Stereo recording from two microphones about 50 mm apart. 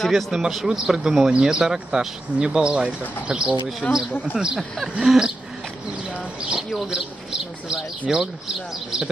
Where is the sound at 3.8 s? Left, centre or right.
Left.